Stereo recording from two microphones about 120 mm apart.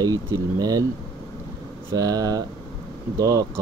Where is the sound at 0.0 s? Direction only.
30° right (ahead or behind).